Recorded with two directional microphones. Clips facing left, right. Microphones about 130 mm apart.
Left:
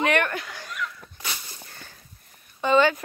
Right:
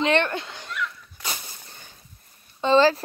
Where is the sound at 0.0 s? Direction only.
25° right (ahead or behind).